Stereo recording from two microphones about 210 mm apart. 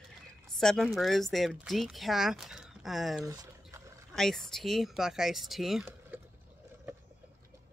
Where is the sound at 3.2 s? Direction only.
15° right (ahead or behind).